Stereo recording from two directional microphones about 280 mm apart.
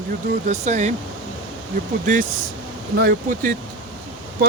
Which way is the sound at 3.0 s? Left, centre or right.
Right.